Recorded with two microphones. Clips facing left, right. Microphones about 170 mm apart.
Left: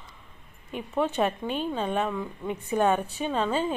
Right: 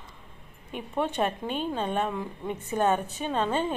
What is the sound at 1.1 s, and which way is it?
A woman's voice, 5° left (ahead or behind).